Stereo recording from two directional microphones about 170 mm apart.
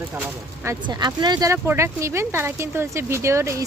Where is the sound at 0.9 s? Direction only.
25° right (ahead or behind).